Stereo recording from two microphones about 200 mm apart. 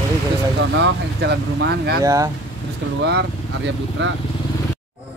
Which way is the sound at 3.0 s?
60° right (ahead or behind).